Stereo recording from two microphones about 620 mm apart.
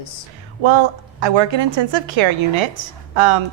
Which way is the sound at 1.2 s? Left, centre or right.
Right.